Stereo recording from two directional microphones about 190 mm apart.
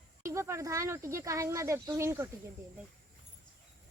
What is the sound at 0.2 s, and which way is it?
Speech, 15° right (ahead or behind).